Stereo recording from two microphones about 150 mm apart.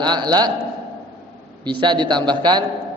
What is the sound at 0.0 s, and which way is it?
Speech, 30° right (ahead or behind).